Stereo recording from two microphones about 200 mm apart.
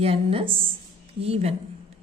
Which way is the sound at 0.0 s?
30° right (ahead or behind).